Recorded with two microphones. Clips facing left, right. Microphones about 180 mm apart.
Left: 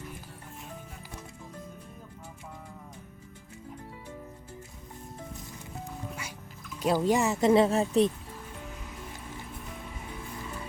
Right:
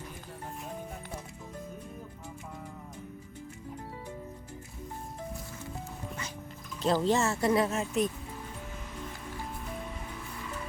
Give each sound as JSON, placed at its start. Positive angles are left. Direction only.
{"t": 6.7, "sound": "speech", "side_deg": 10}